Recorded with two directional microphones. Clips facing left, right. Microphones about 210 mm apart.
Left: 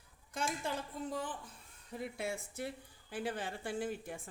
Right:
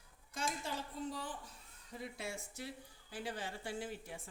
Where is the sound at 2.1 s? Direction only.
55° left (ahead or behind).